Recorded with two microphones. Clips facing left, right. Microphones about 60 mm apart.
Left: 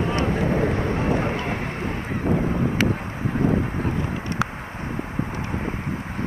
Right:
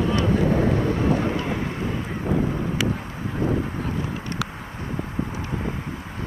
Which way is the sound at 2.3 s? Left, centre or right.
Left.